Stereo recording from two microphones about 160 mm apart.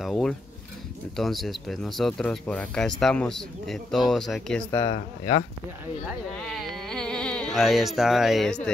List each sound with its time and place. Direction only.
0.0 s a sound: 5° left (ahead or behind)
1.1 s speech: centre (ahead or behind)
4.6 s speech: 25° left (ahead or behind)
4.9 s speech: 35° left (ahead or behind)
6.4 s speech: 5° left (ahead or behind)